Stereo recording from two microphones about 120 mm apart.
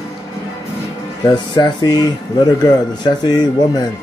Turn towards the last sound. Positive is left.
turn(degrees=35)  # may be behind; listen again after turning